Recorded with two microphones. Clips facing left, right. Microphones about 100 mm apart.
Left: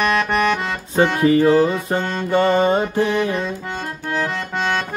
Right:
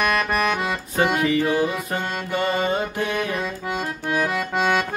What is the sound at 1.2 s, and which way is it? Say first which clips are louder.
Music: left 7 dB; 35° left (ahead or behind).